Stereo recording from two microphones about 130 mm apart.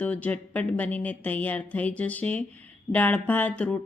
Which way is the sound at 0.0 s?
10° left (ahead or behind).